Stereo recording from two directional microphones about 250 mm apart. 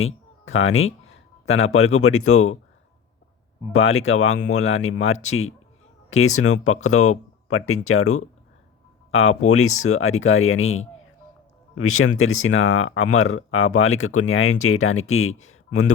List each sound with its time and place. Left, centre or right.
0.0 s a sound: left
1.5 s speech: left
3.7 s speech: left